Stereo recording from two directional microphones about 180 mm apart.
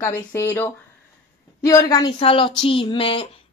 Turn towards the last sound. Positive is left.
turn(degrees=30)  # may be behind; listen again after turning